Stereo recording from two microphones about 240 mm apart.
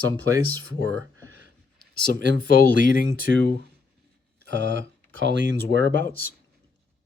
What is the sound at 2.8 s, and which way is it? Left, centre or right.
Speech, left.